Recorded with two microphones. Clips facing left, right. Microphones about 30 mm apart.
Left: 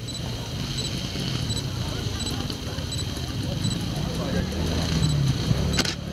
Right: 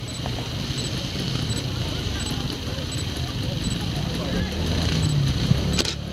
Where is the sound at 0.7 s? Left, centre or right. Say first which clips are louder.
Even; centre.